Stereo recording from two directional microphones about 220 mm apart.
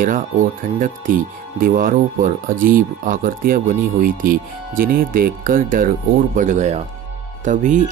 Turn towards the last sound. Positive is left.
turn(degrees=-35)  # may be behind; listen again after turning